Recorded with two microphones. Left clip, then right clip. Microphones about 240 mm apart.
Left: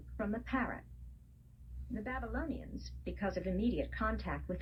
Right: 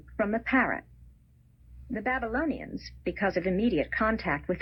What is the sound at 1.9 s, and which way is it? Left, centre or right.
A woman's voice, right.